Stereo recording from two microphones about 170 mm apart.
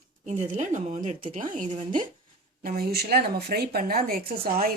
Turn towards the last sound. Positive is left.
turn(degrees=-60)  # may be behind; listen again after turning